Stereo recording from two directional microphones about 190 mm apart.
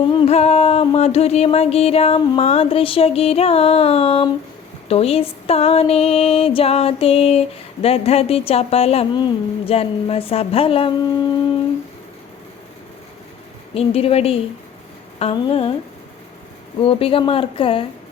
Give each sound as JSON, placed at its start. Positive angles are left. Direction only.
{"t": 0.1, "sound": "music", "side_deg": 30}
{"t": 13.7, "sound": "music", "side_deg": 30}
{"t": 16.8, "sound": "speech", "side_deg": 30}